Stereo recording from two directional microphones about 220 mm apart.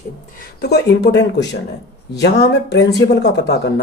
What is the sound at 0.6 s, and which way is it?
Speech, 50° left (ahead or behind).